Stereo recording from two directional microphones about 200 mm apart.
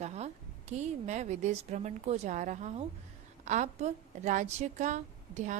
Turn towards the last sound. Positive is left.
turn(degrees=-35)  # may be behind; listen again after turning